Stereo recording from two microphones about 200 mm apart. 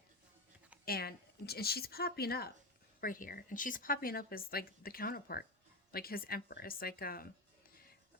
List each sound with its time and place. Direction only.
0.9 s speech: 50° left (ahead or behind)